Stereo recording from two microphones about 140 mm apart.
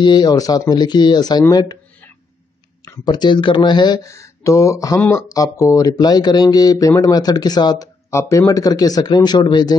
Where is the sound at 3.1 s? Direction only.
35° left (ahead or behind).